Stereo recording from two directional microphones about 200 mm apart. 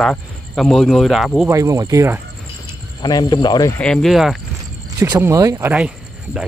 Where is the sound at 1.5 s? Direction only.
15° right (ahead or behind).